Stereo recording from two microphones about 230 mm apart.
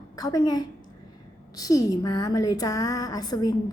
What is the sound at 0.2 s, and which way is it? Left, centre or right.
A woman's voice, centre.